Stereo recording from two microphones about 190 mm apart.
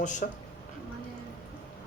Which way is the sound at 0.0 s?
40° left (ahead or behind).